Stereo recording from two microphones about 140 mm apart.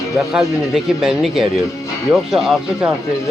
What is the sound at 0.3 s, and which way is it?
Speech, 5° right (ahead or behind).